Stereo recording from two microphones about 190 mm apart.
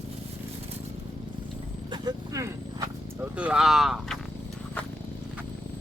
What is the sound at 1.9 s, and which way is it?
Speech, 20° right (ahead or behind).